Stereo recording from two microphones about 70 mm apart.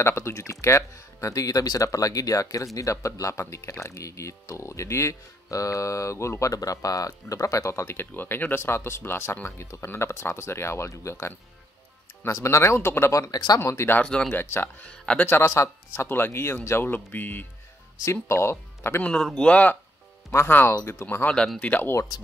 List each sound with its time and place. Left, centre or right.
0.0 s speech: left
12.4 s speech: left
13.1 s speech: left
13.6 s speech: left
14.0 s speech: centre
14.3 s speech: left
14.9 s speech: centre
15.2 s speech: left
15.9 s speech: left
18.0 s speech: left
19.4 s speech: centre
20.2 s speech: left